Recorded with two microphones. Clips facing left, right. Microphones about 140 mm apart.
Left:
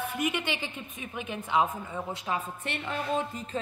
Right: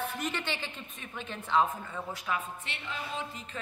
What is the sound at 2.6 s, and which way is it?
Speech, 55° left (ahead or behind).